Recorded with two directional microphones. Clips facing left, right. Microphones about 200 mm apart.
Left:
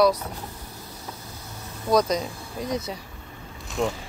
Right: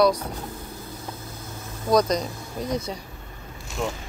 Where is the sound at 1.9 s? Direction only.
5° left (ahead or behind).